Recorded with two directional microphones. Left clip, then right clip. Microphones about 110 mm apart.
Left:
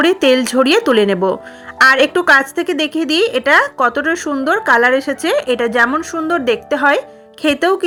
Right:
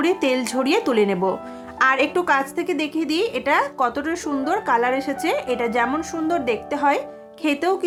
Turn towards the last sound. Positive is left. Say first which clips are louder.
# left 7 dB
turn(degrees=40)  # may be behind; listen again after turning